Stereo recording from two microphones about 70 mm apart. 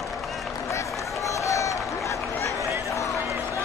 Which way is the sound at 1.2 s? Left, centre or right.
Left.